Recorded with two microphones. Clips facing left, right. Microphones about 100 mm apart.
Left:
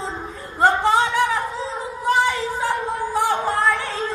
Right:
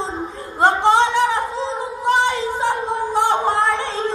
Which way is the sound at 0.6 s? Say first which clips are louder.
Right 2 dB; 25° right (ahead or behind).